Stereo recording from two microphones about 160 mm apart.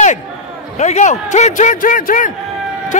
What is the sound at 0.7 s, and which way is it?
A man's voice, 45° left (ahead or behind).